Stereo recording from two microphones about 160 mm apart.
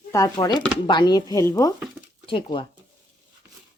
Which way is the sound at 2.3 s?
30° left (ahead or behind).